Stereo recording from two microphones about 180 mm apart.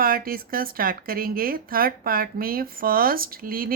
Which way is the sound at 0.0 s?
55° right (ahead or behind).